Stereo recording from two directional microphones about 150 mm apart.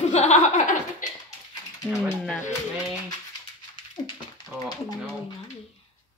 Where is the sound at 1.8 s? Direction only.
5° right (ahead or behind).